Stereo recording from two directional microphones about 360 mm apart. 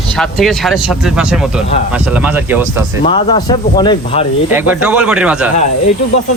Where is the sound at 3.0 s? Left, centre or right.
Centre.